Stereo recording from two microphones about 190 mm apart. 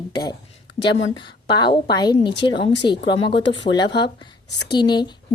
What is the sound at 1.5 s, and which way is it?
Speech, 25° left (ahead or behind).